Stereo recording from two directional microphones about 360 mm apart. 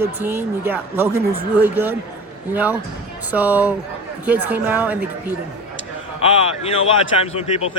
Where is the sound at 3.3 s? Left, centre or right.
Centre.